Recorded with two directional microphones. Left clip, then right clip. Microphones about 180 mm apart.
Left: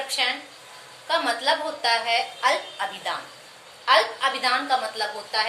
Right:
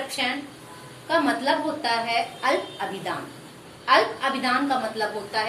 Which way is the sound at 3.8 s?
15° left (ahead or behind).